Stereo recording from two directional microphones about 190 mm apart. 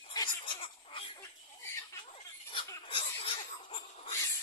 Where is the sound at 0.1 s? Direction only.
25° left (ahead or behind).